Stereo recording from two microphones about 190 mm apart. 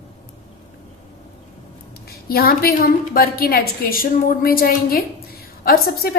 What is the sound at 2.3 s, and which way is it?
A woman's voice, 50° left (ahead or behind).